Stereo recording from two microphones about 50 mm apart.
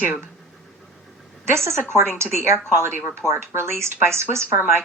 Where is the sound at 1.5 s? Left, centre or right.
Right.